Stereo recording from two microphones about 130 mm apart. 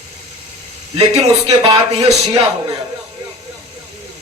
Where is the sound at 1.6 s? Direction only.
40° right (ahead or behind).